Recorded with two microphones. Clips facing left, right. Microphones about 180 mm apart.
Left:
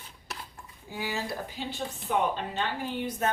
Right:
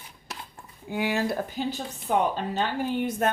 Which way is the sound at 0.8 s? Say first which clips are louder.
Right 7 dB; 60° right (ahead or behind).